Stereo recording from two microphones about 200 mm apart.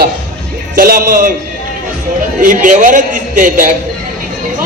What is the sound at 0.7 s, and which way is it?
Speech, 45° right (ahead or behind).